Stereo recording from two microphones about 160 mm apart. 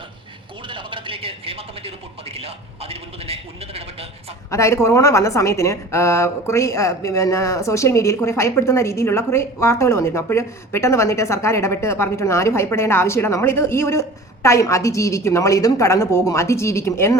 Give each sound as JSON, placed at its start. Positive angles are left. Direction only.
{"t": 0.7, "sound": "a sound", "side_deg": -30}
{"t": 2.3, "sound": "a man's voice", "side_deg": -40}
{"t": 4.5, "sound": "a woman's voice", "side_deg": 20}